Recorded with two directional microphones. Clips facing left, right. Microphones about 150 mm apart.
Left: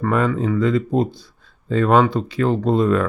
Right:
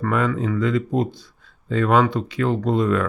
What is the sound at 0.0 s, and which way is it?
Speech, 30° left (ahead or behind).